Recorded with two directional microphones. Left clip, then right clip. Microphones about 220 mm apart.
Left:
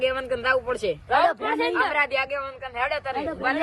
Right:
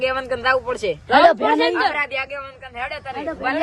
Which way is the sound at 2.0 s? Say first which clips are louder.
Even; 10° left (ahead or behind).